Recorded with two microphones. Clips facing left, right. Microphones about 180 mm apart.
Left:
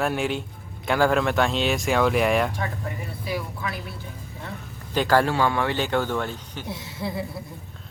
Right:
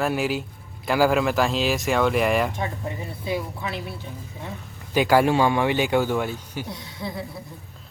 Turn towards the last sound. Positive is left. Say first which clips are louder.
# left 2 dB
turn(degrees=5)  # may be behind; listen again after turning